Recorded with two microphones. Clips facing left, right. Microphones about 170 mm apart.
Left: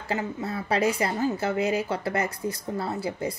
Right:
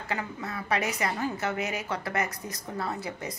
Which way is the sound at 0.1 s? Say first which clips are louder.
Left 5 dB; 30° left (ahead or behind).